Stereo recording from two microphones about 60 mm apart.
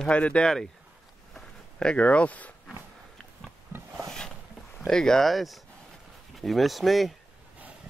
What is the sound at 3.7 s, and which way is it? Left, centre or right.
Wood, right.